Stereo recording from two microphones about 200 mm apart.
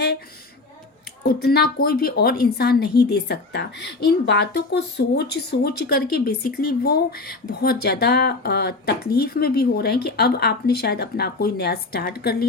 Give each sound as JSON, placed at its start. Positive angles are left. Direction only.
{"t": 1.2, "sound": "a woman's voice", "side_deg": 50}